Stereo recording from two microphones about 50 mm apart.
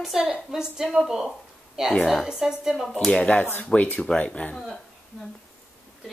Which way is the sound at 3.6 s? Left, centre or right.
Left.